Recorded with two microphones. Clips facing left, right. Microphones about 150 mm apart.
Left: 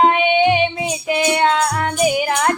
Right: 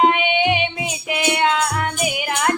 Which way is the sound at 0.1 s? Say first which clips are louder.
Left 4 dB; 35° left (ahead or behind).